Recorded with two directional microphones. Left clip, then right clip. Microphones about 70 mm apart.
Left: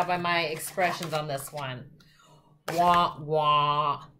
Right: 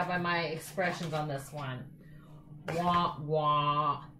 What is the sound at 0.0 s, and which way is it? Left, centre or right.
A woman's voice, left.